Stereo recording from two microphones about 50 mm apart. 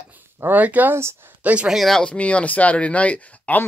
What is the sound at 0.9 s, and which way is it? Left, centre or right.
Speech, right.